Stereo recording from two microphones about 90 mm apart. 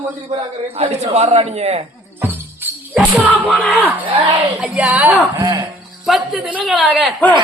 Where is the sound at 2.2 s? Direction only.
25° right (ahead or behind).